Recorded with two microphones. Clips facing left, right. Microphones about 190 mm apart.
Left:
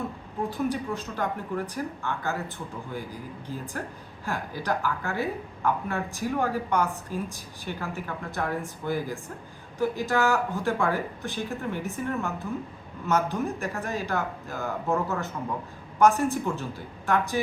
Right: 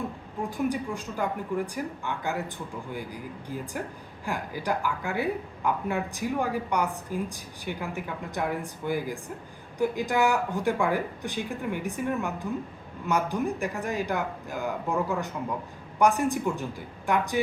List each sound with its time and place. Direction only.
0.5 s a woman's voice: 15° right (ahead or behind)
3.5 s a woman's voice: 15° right (ahead or behind)